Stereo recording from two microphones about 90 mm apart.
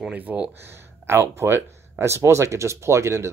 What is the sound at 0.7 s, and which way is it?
Speech, 30° right (ahead or behind).